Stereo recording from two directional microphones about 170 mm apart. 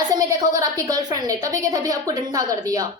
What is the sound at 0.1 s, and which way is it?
A woman's voice, 20° right (ahead or behind).